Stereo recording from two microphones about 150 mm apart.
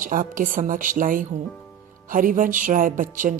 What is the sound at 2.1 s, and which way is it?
Speech, 65° right (ahead or behind).